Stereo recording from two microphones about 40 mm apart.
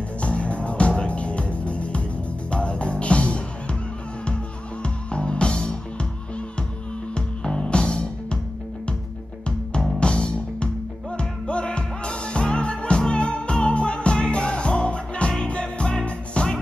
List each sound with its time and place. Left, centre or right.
0.2 s music: left
4.8 s music: left
7.2 s music: left
9.9 s music: left